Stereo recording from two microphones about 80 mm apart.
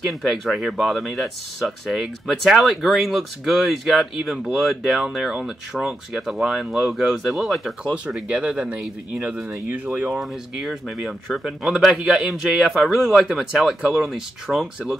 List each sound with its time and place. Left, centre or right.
0.1 s speech: centre
7.8 s speech: centre
10.1 s speech: centre